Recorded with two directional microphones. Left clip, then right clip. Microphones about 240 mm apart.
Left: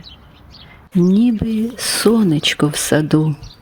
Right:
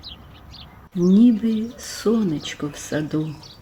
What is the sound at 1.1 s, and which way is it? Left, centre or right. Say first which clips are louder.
Speech: left 1 dB; left.